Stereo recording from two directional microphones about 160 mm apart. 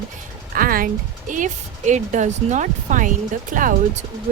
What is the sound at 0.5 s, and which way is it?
Speech, 60° right (ahead or behind).